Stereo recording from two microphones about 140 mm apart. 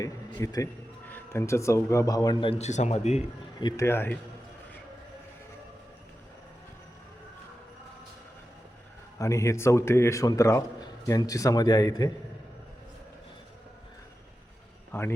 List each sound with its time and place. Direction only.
0.0 s a man's voice: 25° left (ahead or behind)
2.6 s speech: 55° left (ahead or behind)
3.6 s a man's voice: 30° left (ahead or behind)
3.8 s a man's voice: 15° left (ahead or behind)
9.1 s a man's voice: 20° left (ahead or behind)
14.9 s a man's voice: 15° left (ahead or behind)